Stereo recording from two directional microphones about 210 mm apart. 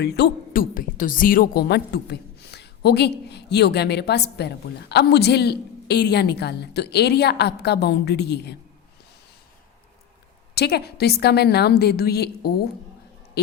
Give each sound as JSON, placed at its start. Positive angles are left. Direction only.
{"t": 0.0, "sound": "a woman's voice", "side_deg": 50}
{"t": 10.5, "sound": "a woman's voice", "side_deg": 50}